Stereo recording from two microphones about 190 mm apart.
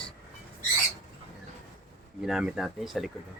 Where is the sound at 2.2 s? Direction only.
5° right (ahead or behind).